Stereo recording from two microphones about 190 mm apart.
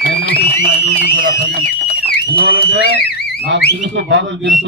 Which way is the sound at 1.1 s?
65° right (ahead or behind).